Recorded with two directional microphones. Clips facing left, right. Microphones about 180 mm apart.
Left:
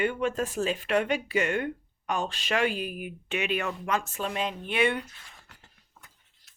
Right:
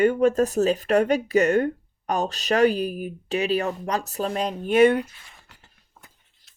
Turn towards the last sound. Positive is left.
turn(degrees=-40)  # may be behind; listen again after turning